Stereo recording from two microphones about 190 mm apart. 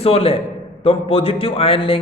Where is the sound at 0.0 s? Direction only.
30° left (ahead or behind).